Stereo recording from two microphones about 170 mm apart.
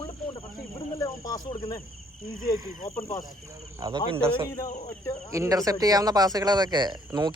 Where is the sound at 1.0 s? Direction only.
20° left (ahead or behind).